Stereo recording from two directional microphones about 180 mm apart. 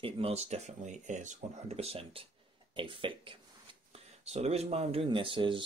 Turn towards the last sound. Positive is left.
turn(degrees=-25)  # may be behind; listen again after turning